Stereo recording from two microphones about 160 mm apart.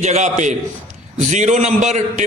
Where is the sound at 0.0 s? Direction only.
50° right (ahead or behind).